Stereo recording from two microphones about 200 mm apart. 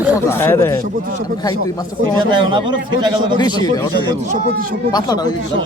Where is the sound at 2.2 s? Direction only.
25° right (ahead or behind).